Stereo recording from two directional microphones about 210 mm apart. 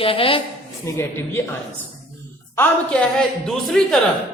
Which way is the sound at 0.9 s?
15° left (ahead or behind).